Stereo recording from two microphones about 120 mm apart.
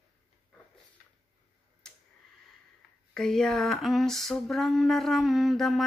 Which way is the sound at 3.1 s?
5° left (ahead or behind).